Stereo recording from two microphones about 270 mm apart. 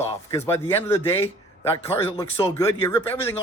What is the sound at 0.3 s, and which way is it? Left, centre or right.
Speech, centre.